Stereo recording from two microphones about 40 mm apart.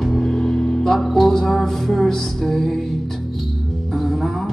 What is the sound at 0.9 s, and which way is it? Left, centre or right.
Music, centre.